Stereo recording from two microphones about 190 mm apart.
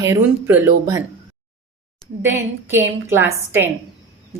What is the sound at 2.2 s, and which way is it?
A woman's voice, 10° right (ahead or behind).